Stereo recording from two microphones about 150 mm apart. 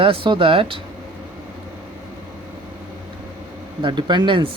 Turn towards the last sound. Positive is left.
turn(degrees=-35)  # may be behind; listen again after turning